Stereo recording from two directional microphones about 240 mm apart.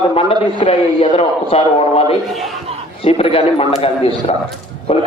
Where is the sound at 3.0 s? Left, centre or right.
Left.